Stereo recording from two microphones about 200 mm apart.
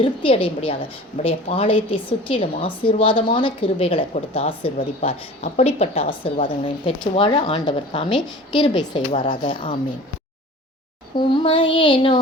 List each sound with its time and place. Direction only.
0.0 s a woman's voice: 25° left (ahead or behind)
11.2 s a woman's voice: 25° left (ahead or behind)